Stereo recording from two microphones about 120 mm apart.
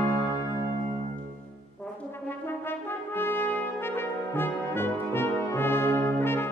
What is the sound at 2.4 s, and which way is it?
Brass instrument, 20° left (ahead or behind).